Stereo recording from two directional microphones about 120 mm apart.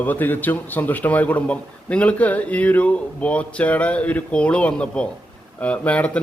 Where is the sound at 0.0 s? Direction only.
15° left (ahead or behind).